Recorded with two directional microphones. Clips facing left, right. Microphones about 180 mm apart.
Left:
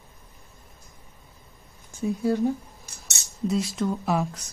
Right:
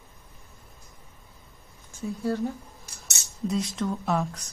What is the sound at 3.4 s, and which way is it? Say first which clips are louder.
Speech: left 2 dB; 5° left (ahead or behind).